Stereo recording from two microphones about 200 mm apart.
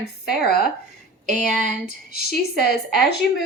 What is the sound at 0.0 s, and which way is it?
Speech, 55° left (ahead or behind).